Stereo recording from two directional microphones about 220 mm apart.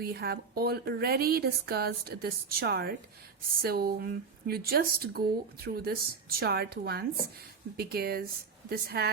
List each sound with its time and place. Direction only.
0.0 s speech: 45° right (ahead or behind)